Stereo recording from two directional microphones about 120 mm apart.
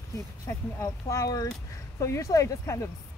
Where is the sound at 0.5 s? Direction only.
25° left (ahead or behind).